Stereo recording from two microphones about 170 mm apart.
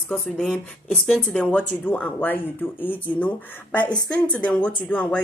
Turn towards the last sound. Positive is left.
turn(degrees=10)  # may be behind; listen again after turning